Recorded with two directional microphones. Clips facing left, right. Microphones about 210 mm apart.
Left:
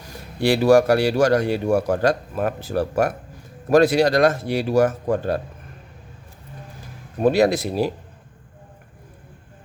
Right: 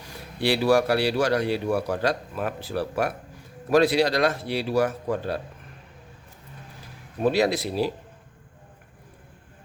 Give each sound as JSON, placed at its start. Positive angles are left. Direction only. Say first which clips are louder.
{"t": 0.3, "sound": "speech", "louder": "left 5 dB", "side_deg": 45}
{"t": 7.2, "sound": "speech", "louder": "left 5 dB", "side_deg": 50}